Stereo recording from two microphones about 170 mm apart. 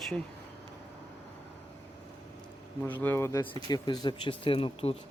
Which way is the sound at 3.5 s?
25° left (ahead or behind).